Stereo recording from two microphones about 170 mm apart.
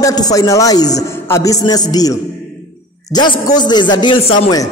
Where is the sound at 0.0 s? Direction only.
20° left (ahead or behind).